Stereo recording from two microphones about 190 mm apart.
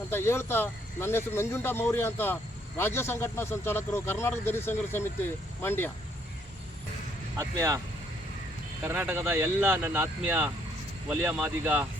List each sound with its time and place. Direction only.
0.1 s speech: 15° left (ahead or behind)
7.3 s speech: 15° right (ahead or behind)
8.9 s speech: 10° right (ahead or behind)